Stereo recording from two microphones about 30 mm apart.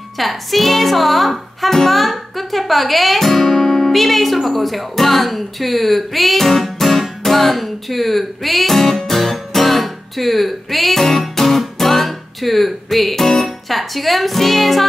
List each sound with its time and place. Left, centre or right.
0.2 s speech: centre
6.6 s music: centre
13.1 s speech: centre